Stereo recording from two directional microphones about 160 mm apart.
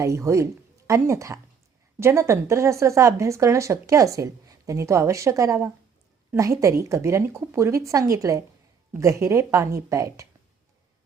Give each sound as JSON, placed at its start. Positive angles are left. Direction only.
{"t": 0.0, "sound": "speech", "side_deg": -20}